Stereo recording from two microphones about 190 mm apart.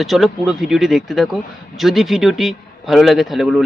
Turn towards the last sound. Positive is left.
turn(degrees=0)  # may be behind; listen again after turning